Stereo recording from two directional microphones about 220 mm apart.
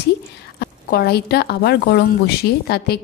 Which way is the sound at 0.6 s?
45° left (ahead or behind).